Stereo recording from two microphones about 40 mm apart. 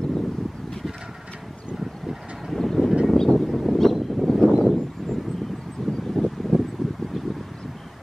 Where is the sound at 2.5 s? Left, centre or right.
Centre.